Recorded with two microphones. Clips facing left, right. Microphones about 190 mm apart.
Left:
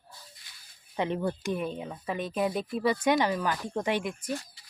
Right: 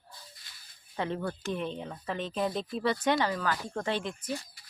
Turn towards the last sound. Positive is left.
turn(degrees=10)  # may be behind; listen again after turning